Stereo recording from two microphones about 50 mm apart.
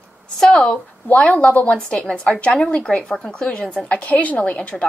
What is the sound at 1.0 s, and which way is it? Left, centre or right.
Speech, left.